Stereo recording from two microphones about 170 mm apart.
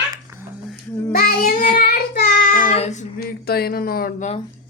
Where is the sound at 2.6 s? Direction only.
35° left (ahead or behind).